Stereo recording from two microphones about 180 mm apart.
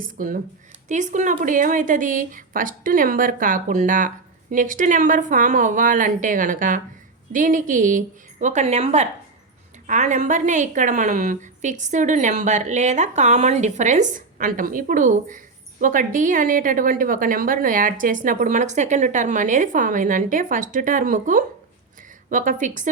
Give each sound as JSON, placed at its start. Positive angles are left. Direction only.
{"t": 0.0, "sound": "a woman's voice", "side_deg": -50}